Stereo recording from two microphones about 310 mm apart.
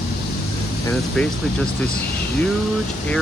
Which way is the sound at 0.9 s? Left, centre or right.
Centre.